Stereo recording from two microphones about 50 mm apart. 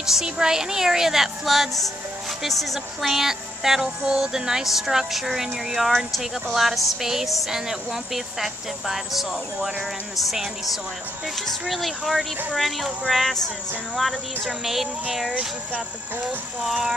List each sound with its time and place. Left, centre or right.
0.0 s music: centre
5.9 s speech: centre
6.5 s music: centre
10.2 s speech: centre
14.6 s speech: centre
15.2 s speech: right